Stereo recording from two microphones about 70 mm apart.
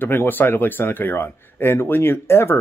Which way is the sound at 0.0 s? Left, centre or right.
Left.